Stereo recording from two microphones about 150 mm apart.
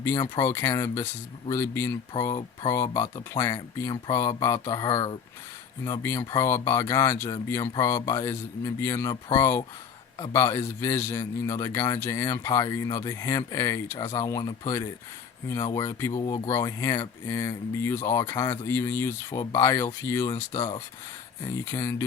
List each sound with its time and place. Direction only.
0.3 s a man's voice: 20° left (ahead or behind)
20.5 s speech: 30° left (ahead or behind)
21.4 s a man's voice: 20° left (ahead or behind)